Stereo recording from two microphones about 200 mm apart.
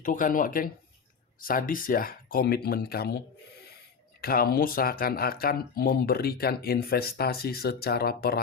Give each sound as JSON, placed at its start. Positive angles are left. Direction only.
{"t": 0.0, "sound": "speech", "side_deg": 40}
{"t": 4.2, "sound": "speech", "side_deg": 50}